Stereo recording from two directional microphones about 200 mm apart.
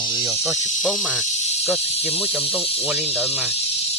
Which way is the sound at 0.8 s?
Centre (ahead or behind).